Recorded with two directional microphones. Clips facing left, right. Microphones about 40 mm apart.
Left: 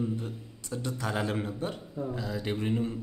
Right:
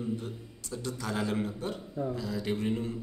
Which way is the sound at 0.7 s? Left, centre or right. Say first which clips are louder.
Left 2 dB; centre.